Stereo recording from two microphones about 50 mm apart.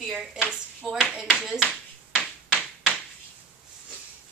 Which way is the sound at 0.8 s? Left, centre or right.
Centre.